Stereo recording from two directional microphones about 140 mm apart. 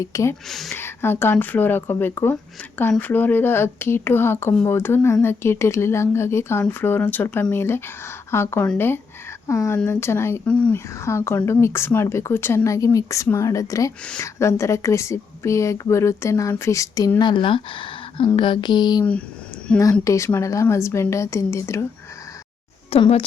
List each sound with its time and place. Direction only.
0.0 s speech: 20° left (ahead or behind)
0.4 s speech: centre (ahead or behind)
0.7 s speech: 15° left (ahead or behind)
10.5 s speech: 10° left (ahead or behind)
10.9 s speech: 20° left (ahead or behind); by 18.3 s 40° left (ahead or behind)
18.3 s a sound: 35° left (ahead or behind)
19.8 s speech: 20° left (ahead or behind)
22.9 s speech: 45° left (ahead or behind)